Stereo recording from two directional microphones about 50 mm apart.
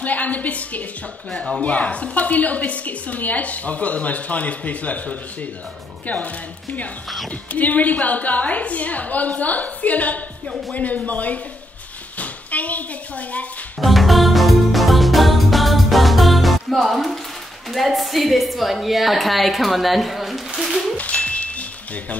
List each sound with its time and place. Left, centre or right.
0.0 s a woman's voice: left
1.3 s speech: centre
1.6 s a woman's voice: left
12.2 s a sound: left
13.7 s music: centre
17.6 s a woman's voice: centre
21.0 s music: left